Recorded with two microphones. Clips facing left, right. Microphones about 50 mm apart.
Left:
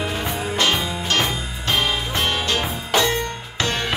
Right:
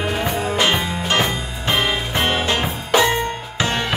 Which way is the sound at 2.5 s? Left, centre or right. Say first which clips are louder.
Right 3 dB; centre.